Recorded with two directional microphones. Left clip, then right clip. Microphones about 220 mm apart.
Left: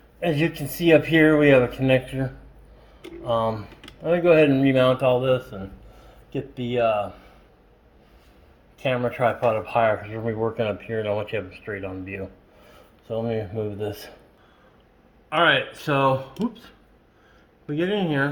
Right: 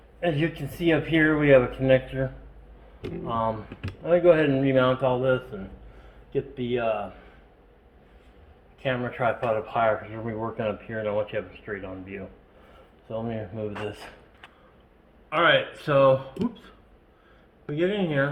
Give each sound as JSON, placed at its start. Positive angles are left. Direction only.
{"t": 0.2, "sound": "speech", "side_deg": 55}
{"t": 3.2, "sound": "speech", "side_deg": 50}
{"t": 8.8, "sound": "speech", "side_deg": 60}
{"t": 15.3, "sound": "speech", "side_deg": 40}
{"t": 17.7, "sound": "speech", "side_deg": 40}